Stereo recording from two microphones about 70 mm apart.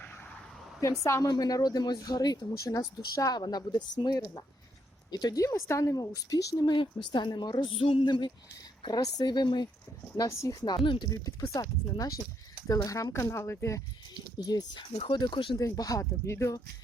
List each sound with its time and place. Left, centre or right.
1.0 s speech: left
1.3 s speech: left
3.2 s speech: left
5.1 s speech: left
6.7 s a woman's voice: left
10.2 s speech: left
11.0 s speech: left
13.1 s speech: left
14.3 s a woman's voice: left
15.5 s speech: left